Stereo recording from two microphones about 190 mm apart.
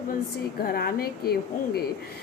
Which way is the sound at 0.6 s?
50° left (ahead or behind).